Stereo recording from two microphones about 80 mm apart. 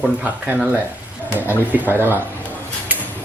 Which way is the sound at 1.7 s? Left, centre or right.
Right.